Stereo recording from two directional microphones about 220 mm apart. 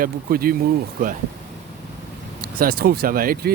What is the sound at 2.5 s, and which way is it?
Speech, 45° right (ahead or behind).